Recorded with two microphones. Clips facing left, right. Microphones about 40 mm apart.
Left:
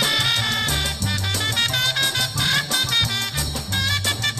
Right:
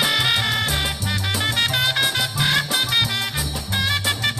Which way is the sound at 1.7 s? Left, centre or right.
Centre.